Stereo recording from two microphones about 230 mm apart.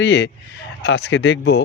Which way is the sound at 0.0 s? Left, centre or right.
Left.